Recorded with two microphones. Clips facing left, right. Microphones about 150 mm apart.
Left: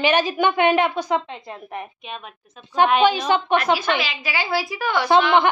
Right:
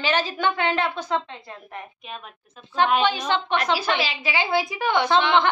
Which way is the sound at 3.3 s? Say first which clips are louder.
Left 4 dB; 10° left (ahead or behind).